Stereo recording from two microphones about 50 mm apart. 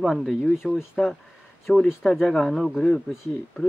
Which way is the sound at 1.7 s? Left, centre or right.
Left.